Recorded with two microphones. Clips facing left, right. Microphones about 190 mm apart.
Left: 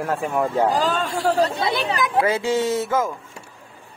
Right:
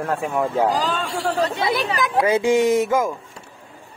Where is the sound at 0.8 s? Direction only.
45° left (ahead or behind).